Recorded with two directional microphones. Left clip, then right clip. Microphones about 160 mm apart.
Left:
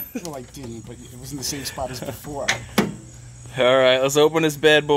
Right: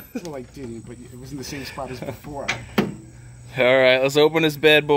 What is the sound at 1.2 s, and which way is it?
Speech, 40° left (ahead or behind).